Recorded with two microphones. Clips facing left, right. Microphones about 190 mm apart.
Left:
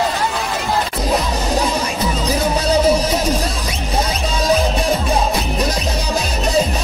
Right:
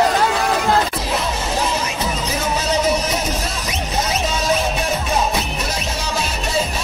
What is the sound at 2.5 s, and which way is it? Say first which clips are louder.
Music: left 4 dB; 35° left (ahead or behind).